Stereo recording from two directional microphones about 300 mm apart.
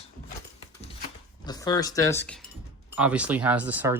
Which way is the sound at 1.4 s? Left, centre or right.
Centre.